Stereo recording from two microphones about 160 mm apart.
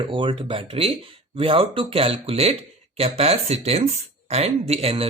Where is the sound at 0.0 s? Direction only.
30° right (ahead or behind).